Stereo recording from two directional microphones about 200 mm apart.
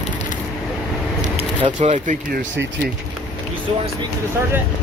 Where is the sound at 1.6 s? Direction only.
35° right (ahead or behind).